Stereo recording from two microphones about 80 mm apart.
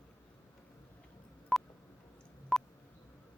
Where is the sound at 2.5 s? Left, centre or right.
Centre.